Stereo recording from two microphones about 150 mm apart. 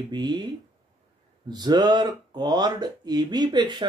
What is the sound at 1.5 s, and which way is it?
Speech, 30° right (ahead or behind).